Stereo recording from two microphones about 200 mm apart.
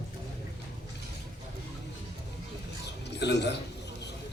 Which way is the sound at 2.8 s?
60° left (ahead or behind).